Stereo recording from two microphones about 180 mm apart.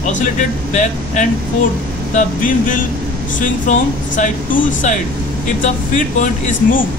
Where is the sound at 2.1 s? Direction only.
45° left (ahead or behind).